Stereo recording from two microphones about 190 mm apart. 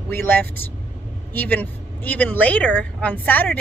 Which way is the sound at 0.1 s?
10° left (ahead or behind).